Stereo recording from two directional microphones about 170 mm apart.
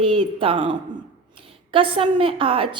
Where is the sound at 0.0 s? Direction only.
30° right (ahead or behind).